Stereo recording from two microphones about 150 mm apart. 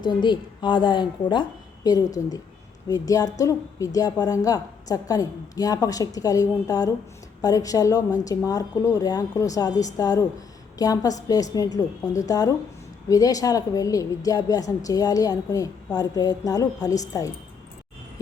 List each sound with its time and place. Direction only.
0.0 s a woman's voice: 30° left (ahead or behind)